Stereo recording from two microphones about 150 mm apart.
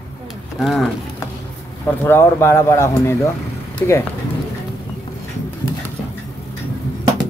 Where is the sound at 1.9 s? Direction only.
15° left (ahead or behind).